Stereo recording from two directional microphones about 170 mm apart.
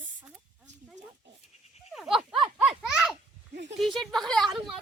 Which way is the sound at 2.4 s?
5° right (ahead or behind).